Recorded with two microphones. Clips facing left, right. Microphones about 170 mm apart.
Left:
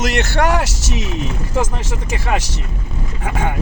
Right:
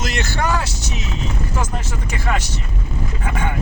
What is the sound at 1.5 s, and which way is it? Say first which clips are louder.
Speech: left 4 dB; 90° left.